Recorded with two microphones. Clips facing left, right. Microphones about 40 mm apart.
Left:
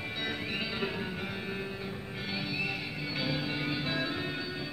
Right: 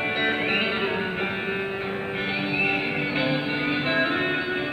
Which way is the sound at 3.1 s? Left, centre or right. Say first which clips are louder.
Right 6 dB; right.